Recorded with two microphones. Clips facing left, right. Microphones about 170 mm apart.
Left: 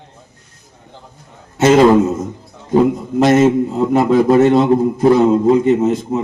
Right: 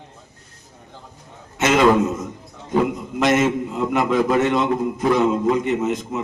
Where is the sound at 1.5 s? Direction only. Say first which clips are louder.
Left 6 dB; 30° left (ahead or behind).